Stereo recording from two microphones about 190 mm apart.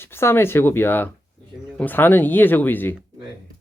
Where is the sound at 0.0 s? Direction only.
10° left (ahead or behind).